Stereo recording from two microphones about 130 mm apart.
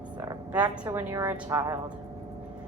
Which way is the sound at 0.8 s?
15° right (ahead or behind).